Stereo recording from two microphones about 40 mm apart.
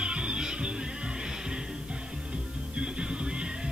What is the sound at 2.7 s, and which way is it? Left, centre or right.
Music, right.